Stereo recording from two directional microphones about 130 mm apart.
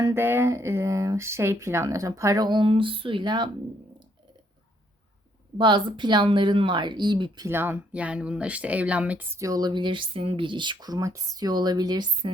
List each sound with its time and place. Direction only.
0.0 s speech: 20° right (ahead or behind); by 3.5 s 35° right (ahead or behind)
5.5 s speech: 35° right (ahead or behind)
7.5 s speech: 15° right (ahead or behind)
9.4 s speech: 30° right (ahead or behind)